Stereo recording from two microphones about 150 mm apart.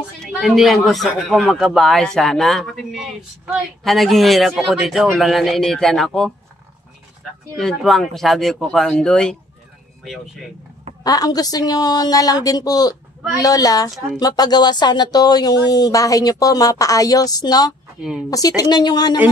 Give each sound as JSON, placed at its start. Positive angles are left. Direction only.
{"t": 0.2, "sound": "a man's voice", "side_deg": 0}
{"t": 7.5, "sound": "a man's voice", "side_deg": 0}
{"t": 11.1, "sound": "speech", "side_deg": 25}